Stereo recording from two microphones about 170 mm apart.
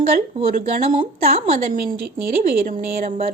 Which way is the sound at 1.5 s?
55° right (ahead or behind).